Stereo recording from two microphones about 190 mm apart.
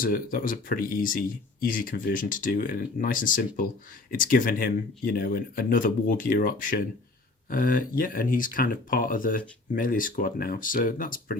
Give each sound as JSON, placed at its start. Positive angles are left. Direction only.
{"t": 0.0, "sound": "speech", "side_deg": 50}